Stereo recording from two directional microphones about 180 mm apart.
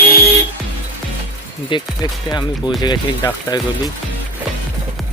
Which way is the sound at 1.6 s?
25° left (ahead or behind).